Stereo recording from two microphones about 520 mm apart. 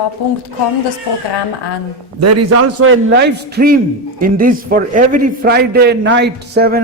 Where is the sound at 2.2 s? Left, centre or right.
Right.